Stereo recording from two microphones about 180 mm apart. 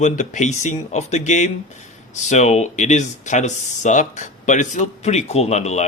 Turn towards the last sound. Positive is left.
turn(degrees=40)  # may be behind; listen again after turning